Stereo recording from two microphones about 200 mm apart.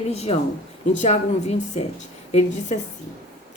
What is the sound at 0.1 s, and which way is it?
Speech, 30° left (ahead or behind).